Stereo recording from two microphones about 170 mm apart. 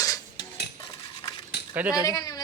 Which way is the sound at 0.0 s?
20° left (ahead or behind).